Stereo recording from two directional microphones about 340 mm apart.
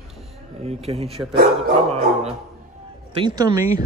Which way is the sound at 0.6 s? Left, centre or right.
Centre.